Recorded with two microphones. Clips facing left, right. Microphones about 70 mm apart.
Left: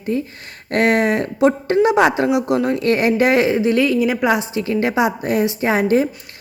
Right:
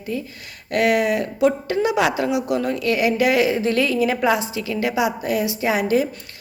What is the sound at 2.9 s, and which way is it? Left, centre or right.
A woman's voice, left.